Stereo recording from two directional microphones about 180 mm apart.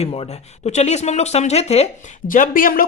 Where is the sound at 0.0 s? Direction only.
35° left (ahead or behind).